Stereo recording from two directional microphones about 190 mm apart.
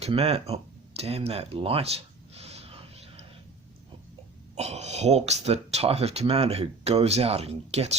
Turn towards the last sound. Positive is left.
turn(degrees=-35)  # may be behind; listen again after turning